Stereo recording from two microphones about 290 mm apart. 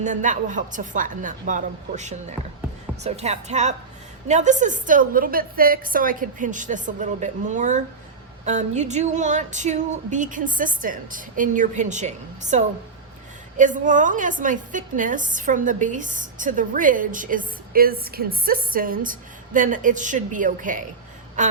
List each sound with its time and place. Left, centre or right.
0.0 s a woman's voice: right
21.4 s quack: right